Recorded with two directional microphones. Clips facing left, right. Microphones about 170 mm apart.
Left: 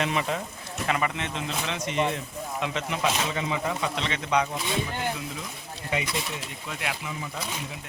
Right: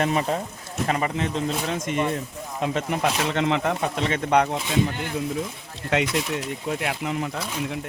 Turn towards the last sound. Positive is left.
turn(degrees=-45)  # may be behind; listen again after turning